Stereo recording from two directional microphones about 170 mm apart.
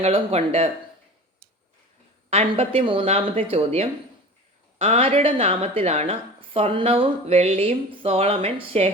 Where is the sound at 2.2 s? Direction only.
35° right (ahead or behind).